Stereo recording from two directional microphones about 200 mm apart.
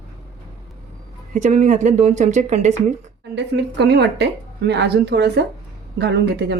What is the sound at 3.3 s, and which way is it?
A woman's voice, 55° right (ahead or behind).